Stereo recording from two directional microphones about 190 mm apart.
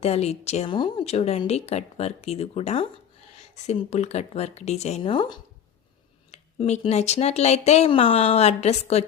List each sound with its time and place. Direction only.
0.0 s a woman's voice: 35° left (ahead or behind)